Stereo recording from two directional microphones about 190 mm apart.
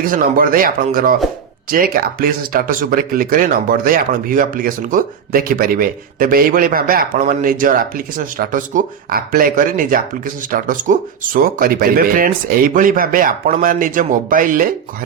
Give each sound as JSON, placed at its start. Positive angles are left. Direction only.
{"t": 0.0, "sound": "speech", "side_deg": -50}